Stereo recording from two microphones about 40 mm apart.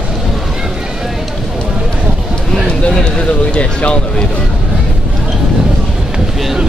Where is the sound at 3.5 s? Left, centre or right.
Left.